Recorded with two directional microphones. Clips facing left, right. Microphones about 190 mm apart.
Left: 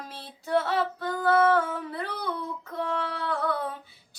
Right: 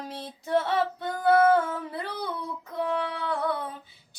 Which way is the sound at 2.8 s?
15° right (ahead or behind).